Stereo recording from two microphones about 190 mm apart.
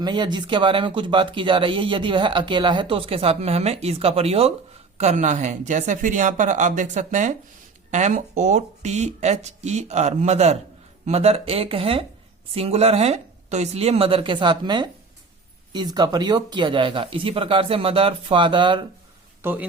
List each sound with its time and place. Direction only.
0.0 s speech: 25° right (ahead or behind)
19.4 s speech: 10° right (ahead or behind)